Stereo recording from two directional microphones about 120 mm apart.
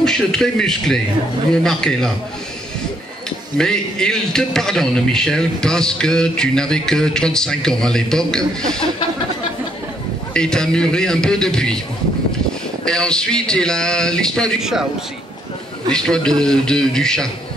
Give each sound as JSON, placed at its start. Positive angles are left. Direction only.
{"t": 0.0, "sound": "a man's voice", "side_deg": 5}
{"t": 3.5, "sound": "a man's voice", "side_deg": 5}
{"t": 10.3, "sound": "a man's voice", "side_deg": 5}
{"t": 12.8, "sound": "a man's voice", "side_deg": 5}
{"t": 15.9, "sound": "a man's voice", "side_deg": 5}